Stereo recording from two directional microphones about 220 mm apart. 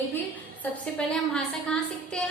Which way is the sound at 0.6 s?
5° left (ahead or behind).